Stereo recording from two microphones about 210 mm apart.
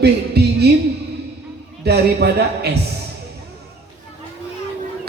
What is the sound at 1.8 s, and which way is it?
Speech, 50° right (ahead or behind).